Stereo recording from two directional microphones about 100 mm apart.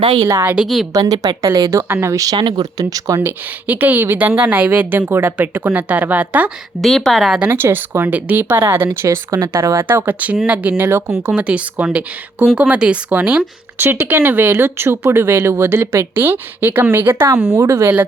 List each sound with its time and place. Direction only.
0.0 s a woman's voice: 65° right (ahead or behind)
0.3 s a woman's voice: 25° right (ahead or behind)
0.5 s a woman's voice: 5° right (ahead or behind)
0.9 s speech: 35° right (ahead or behind)
2.4 s speech: 45° right (ahead or behind)
3.2 s a woman's voice: 20° right (ahead or behind)
6.8 s a woman's voice: centre (ahead or behind)
7.3 s a woman's voice: 20° right (ahead or behind)
9.8 s a woman's voice: 20° right (ahead or behind)
11.3 s speech: 10° right (ahead or behind)
13.7 s a woman's voice: 20° right (ahead or behind)